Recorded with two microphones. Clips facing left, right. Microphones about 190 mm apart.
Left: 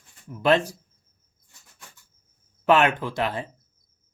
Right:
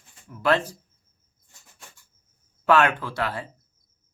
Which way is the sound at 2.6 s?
20° left (ahead or behind).